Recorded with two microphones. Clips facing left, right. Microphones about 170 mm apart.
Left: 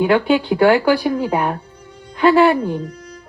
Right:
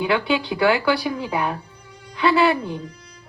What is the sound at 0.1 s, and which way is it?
A woman's voice, 40° left (ahead or behind).